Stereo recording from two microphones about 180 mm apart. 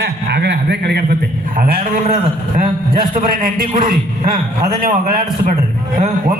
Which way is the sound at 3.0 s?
50° right (ahead or behind).